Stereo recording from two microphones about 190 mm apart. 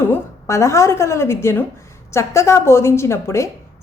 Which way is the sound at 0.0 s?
15° left (ahead or behind).